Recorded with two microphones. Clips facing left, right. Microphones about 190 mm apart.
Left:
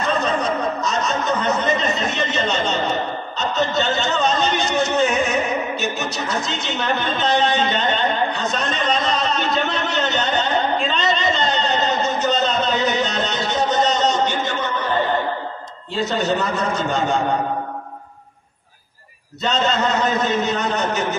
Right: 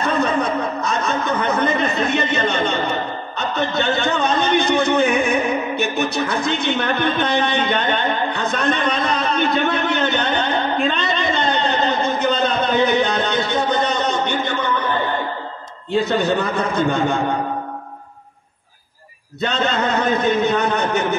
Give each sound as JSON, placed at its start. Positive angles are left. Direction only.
{"t": 0.0, "sound": "speech", "side_deg": -55}
{"t": 15.9, "sound": "a man's voice", "side_deg": -55}
{"t": 19.4, "sound": "a man's voice", "side_deg": -55}